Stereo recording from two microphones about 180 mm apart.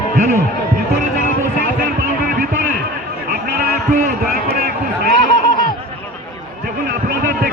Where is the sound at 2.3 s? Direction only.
45° right (ahead or behind).